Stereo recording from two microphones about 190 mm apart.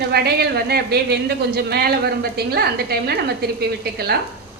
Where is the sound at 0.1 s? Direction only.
55° right (ahead or behind).